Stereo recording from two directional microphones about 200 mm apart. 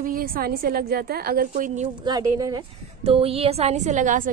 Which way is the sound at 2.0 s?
20° right (ahead or behind).